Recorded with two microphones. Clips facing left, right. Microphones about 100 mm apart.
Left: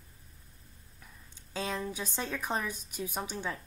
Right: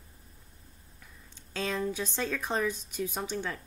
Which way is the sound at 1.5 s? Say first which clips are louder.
Right 3 dB; 15° left (ahead or behind).